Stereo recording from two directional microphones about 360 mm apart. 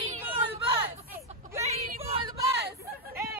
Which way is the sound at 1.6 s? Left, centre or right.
Centre.